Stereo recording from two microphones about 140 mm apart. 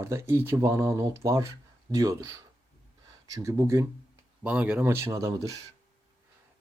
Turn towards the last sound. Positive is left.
turn(degrees=-25)  # may be behind; listen again after turning